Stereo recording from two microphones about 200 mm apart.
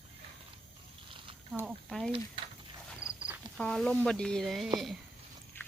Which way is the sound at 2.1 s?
25° right (ahead or behind).